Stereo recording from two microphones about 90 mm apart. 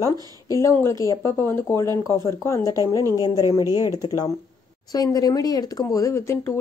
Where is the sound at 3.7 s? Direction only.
45° left (ahead or behind).